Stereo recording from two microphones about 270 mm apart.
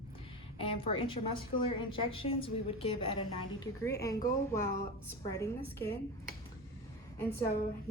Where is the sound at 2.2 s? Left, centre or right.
Left.